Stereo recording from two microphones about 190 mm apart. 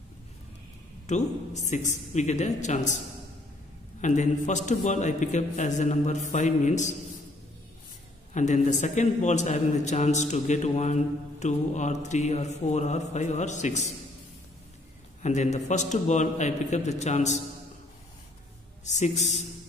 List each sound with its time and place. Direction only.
1.0 s a man's voice: 35° left (ahead or behind)
4.0 s a man's voice: 40° left (ahead or behind)
8.3 s a man's voice: 40° left (ahead or behind)
15.2 s a man's voice: 40° left (ahead or behind)
18.9 s a man's voice: 40° left (ahead or behind)